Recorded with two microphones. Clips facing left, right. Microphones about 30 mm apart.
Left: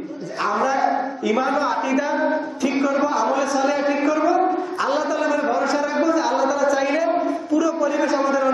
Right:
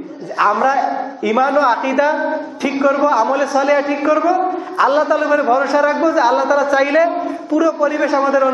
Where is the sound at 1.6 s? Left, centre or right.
Right.